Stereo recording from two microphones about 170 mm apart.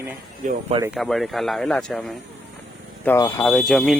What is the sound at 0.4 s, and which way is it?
Speech, 50° right (ahead or behind).